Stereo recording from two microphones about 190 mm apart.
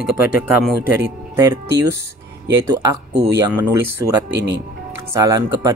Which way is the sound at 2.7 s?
15° right (ahead or behind).